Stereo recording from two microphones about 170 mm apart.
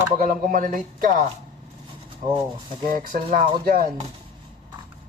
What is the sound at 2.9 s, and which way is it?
A man's voice, 55° right (ahead or behind).